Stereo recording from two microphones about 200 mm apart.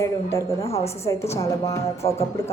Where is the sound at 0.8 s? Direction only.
30° left (ahead or behind).